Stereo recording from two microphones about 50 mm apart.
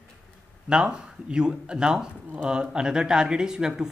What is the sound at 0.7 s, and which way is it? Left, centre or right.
Speech, centre.